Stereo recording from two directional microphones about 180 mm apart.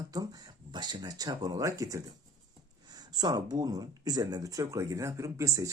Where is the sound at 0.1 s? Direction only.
20° right (ahead or behind).